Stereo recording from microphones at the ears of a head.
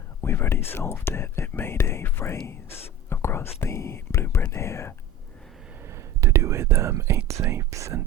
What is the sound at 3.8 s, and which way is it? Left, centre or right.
Speech, left.